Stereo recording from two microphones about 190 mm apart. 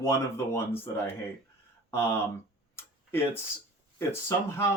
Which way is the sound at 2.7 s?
10° left (ahead or behind).